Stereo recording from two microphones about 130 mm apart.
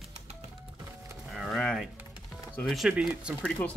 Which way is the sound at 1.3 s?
Centre (ahead or behind).